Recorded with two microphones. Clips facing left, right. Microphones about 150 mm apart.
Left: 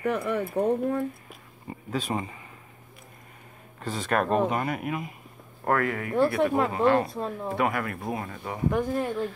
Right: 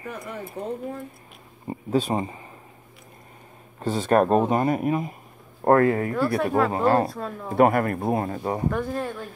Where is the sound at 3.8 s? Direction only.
30° right (ahead or behind).